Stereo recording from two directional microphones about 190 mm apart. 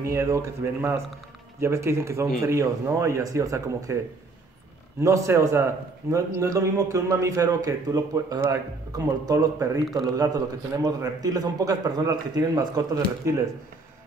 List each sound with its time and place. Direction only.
0.0 s a man's voice: 15° right (ahead or behind)
5.0 s a man's voice: 15° right (ahead or behind)
9.8 s a man's voice: centre (ahead or behind)
10.1 s a man's voice: 20° right (ahead or behind)